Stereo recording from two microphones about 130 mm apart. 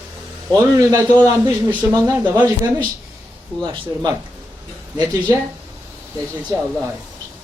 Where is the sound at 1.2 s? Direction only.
20° right (ahead or behind).